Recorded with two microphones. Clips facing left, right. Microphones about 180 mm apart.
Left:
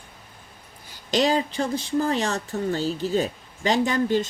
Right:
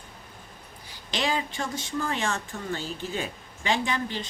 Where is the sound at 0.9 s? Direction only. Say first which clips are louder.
Left 7 dB; 45° left (ahead or behind).